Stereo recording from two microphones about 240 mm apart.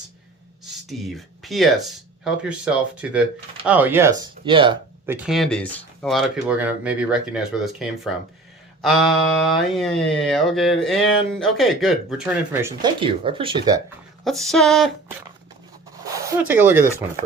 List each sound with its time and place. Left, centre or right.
0.6 s a sound: centre
2.2 s speech: centre
4.2 s speech: right
5.0 s speech: centre
9.4 s speech: centre
12.8 s speech: right
14.3 s speech: centre
16.1 s speech: centre